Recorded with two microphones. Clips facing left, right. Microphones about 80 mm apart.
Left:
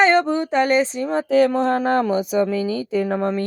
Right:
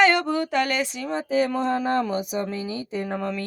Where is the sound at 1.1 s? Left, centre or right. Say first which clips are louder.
Left 7 dB; left.